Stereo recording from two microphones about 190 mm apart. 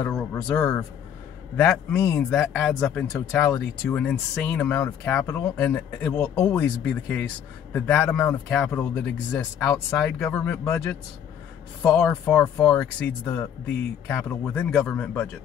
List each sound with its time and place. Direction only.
0.0 s speech: 5° left (ahead or behind)